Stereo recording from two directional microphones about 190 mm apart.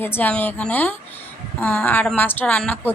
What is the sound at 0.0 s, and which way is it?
A woman's voice, 10° left (ahead or behind).